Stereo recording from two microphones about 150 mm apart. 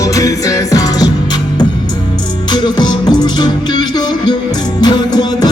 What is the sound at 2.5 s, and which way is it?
Music, 30° left (ahead or behind).